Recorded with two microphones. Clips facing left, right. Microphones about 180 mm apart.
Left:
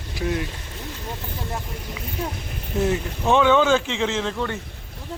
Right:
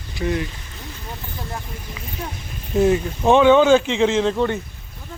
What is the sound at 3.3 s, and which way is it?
Speech, 15° right (ahead or behind).